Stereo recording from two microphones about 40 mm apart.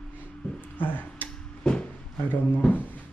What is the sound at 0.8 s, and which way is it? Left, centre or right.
Speech, left.